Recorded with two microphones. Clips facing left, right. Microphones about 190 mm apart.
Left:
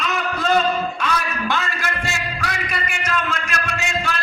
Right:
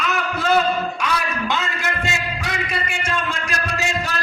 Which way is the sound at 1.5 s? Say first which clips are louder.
Left 2 dB; 20° right (ahead or behind).